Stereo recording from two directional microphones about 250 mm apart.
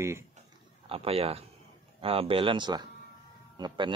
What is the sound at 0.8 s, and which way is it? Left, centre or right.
Speech, right.